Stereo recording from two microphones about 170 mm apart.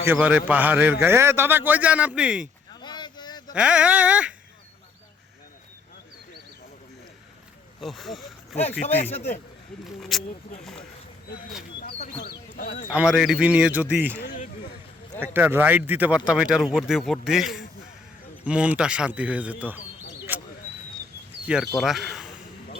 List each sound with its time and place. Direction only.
0.0 s a man's voice: 10° right (ahead or behind)
2.8 s a sound: 25° left (ahead or behind)
3.5 s a man's voice: 5° right (ahead or behind)
7.8 s speech: centre (ahead or behind)
9.0 s a man's voice: 40° left (ahead or behind)
9.8 s speech: centre (ahead or behind)
12.5 s a man's voice: 50° left (ahead or behind)
12.9 s a man's voice: 5° right (ahead or behind)
15.2 s a man's voice: 10° right (ahead or behind)
20.3 s a sound: 10° right (ahead or behind)
21.4 s speech: 5° right (ahead or behind)